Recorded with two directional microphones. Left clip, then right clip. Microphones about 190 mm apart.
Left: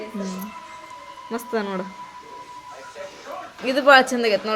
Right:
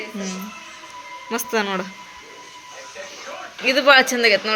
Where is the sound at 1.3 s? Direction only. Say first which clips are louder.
Right 4 dB; 5° left (ahead or behind).